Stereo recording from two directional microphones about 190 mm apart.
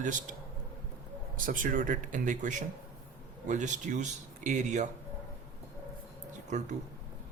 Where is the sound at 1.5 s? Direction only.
45° right (ahead or behind).